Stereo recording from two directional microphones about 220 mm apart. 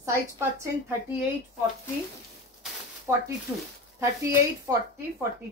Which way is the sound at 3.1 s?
10° right (ahead or behind).